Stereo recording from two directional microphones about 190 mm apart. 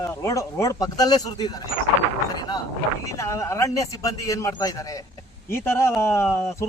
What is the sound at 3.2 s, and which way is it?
Speech, 15° left (ahead or behind).